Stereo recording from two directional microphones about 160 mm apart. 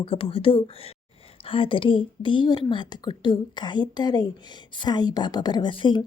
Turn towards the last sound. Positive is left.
turn(degrees=30)  # may be behind; listen again after turning